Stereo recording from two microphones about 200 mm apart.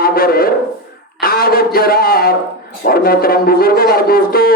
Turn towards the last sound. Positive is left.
turn(degrees=50)  # may be behind; listen again after turning